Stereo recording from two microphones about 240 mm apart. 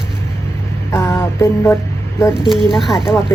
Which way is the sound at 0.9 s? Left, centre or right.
Centre.